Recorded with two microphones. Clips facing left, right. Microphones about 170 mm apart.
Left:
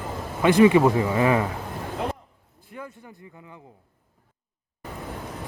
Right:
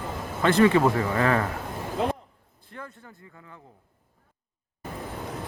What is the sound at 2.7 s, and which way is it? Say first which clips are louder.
Vehicle: left 3 dB; 10° left (ahead or behind).